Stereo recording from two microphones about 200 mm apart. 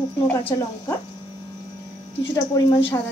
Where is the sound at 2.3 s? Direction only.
20° left (ahead or behind).